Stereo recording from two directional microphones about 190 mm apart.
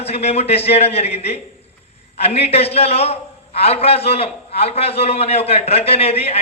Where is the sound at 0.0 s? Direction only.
35° left (ahead or behind).